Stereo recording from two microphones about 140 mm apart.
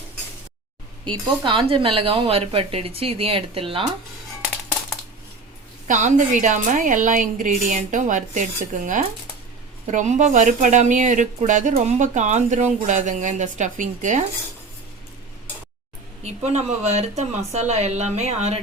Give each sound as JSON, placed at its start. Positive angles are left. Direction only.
{"t": 1.0, "sound": "speech", "side_deg": -35}
{"t": 5.9, "sound": "a woman's voice", "side_deg": -60}
{"t": 9.8, "sound": "a woman's voice", "side_deg": -60}
{"t": 16.5, "sound": "speech", "side_deg": -55}